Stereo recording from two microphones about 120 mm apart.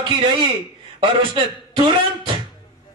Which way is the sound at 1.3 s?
45° right (ahead or behind).